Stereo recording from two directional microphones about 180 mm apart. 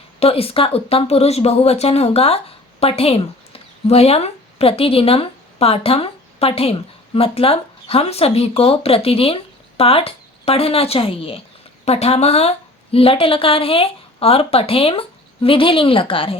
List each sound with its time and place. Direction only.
0.2 s a woman's voice: 35° left (ahead or behind)